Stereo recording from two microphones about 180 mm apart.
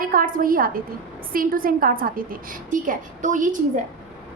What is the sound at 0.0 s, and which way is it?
A woman's voice, 50° right (ahead or behind).